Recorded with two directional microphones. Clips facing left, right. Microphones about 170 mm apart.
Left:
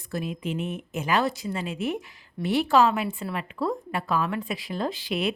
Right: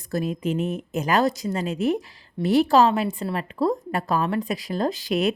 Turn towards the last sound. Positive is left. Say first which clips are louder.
# right 5 dB
turn(degrees=-40)  # may be behind; listen again after turning